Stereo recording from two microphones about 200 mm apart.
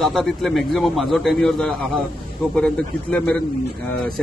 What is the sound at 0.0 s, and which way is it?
Speech, centre (ahead or behind).